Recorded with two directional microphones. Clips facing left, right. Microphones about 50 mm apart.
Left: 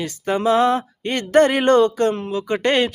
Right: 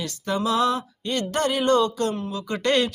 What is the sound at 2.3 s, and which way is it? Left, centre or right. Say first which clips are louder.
Speech: left 4 dB; left.